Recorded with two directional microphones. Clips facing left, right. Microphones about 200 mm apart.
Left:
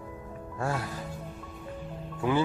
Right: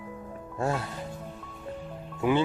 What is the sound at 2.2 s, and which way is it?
Speech, 25° right (ahead or behind).